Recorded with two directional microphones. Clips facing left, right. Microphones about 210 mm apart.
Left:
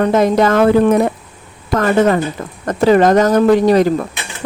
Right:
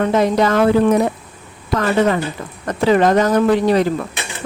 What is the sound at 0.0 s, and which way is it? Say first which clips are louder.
Speech: left 3 dB; 45° left (ahead or behind).